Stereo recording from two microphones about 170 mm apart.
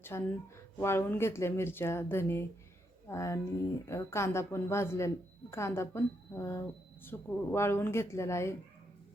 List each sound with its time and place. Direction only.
0.0 s a woman's voice: 15° left (ahead or behind)